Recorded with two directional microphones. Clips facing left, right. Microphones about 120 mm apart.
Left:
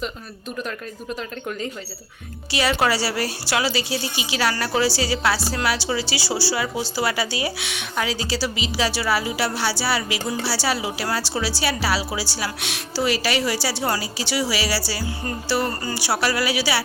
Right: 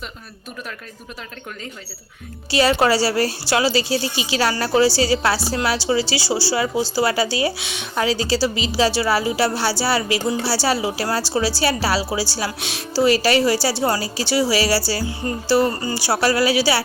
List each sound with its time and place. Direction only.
2.5 s a woman's voice: 35° right (ahead or behind)